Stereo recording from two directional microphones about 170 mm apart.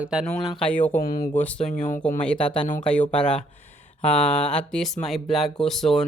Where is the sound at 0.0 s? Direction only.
5° right (ahead or behind).